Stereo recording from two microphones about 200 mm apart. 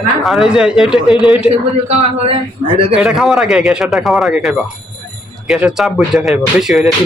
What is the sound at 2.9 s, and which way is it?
Speech, 5° right (ahead or behind).